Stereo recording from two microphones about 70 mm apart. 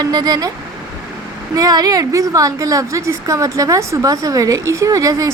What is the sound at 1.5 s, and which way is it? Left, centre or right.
A woman's voice, right.